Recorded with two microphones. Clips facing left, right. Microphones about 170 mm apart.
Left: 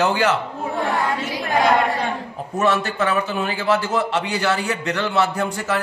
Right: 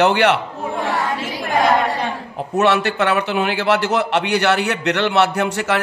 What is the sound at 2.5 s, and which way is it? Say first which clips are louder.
A man's voice: right 3 dB; 75° right (ahead or behind).